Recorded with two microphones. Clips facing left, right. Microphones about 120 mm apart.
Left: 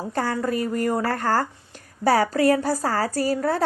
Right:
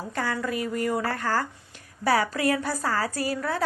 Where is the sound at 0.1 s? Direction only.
40° left (ahead or behind).